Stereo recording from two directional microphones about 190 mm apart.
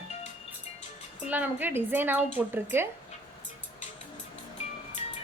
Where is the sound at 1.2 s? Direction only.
10° right (ahead or behind).